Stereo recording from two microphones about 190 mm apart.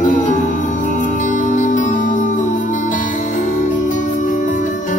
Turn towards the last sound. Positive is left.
turn(degrees=40)  # may be behind; listen again after turning